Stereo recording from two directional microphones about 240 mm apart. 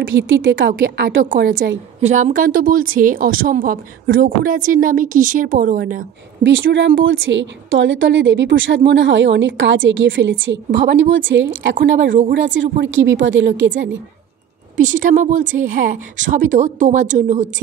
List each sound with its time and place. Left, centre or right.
0.0 s a woman's voice: right
6.4 s a woman's voice: right
14.8 s a woman's voice: right